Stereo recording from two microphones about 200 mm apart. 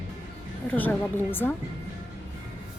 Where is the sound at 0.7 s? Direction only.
10° left (ahead or behind).